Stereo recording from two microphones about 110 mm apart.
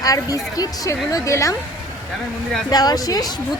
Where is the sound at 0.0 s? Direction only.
30° left (ahead or behind).